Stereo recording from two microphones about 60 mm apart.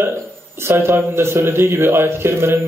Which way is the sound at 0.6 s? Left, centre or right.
Right.